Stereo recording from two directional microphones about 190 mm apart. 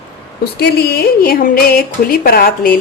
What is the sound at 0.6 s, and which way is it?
Speech, 55° left (ahead or behind).